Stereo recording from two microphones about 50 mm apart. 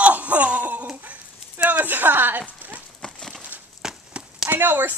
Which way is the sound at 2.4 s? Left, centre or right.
Right.